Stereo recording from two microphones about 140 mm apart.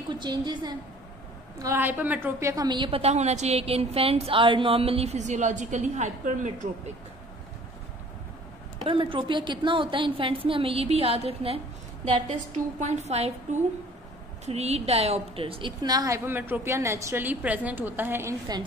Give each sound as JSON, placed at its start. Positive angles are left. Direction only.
{"t": 0.1, "sound": "a woman's voice", "side_deg": -30}
{"t": 1.6, "sound": "a woman's voice", "side_deg": -15}
{"t": 2.5, "sound": "a woman's voice", "side_deg": -30}
{"t": 8.8, "sound": "a woman's voice", "side_deg": -35}